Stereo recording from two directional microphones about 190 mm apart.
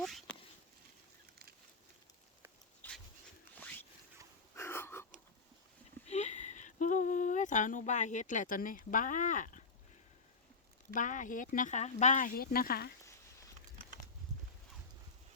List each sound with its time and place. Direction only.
0.0 s speech: centre (ahead or behind)
2.8 s dog: 10° left (ahead or behind)
4.5 s wheeze: 10° left (ahead or behind)
6.1 s a sound: 35° left (ahead or behind)
10.9 s speech: 45° left (ahead or behind)